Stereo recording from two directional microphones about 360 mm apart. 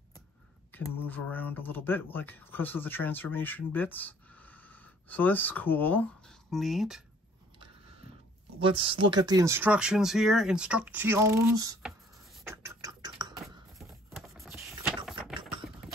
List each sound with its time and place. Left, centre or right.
0.7 s speech: centre
8.5 s speech: centre
12.4 s typing: centre
13.7 s a sound: centre
15.0 s typing: centre